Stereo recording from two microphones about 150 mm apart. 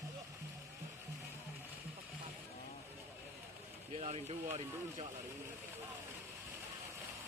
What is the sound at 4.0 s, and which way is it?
Speech, 45° right (ahead or behind).